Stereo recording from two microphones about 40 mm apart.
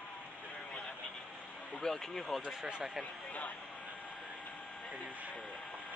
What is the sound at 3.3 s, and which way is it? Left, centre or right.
Speech, left.